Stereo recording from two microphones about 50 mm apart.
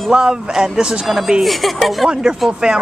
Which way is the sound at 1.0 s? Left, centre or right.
Centre.